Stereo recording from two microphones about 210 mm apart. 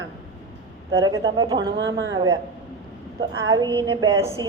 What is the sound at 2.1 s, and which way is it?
Speech, 20° right (ahead or behind).